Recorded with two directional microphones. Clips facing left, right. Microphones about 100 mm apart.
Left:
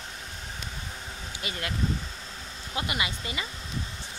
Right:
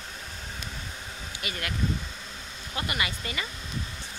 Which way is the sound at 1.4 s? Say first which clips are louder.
Even; 25° left (ahead or behind).